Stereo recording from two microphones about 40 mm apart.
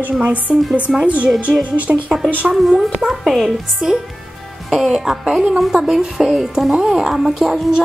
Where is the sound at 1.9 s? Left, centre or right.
Centre.